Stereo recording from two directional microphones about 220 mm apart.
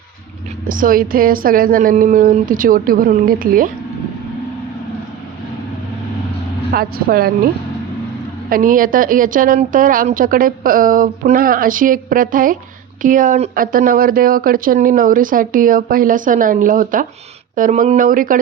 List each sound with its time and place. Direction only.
0.7 s speech: 40° right (ahead or behind)
6.7 s speech: 45° right (ahead or behind)
8.4 s speech: 40° right (ahead or behind)